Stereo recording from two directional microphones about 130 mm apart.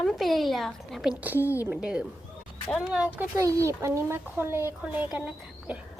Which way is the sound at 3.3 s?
25° right (ahead or behind).